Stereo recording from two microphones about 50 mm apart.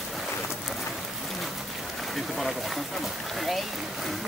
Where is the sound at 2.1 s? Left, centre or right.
Centre.